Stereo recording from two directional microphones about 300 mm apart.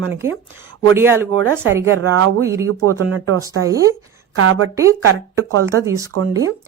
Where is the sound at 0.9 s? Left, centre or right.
Centre.